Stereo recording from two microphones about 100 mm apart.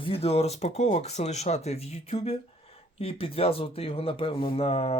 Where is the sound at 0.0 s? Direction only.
75° left (ahead or behind).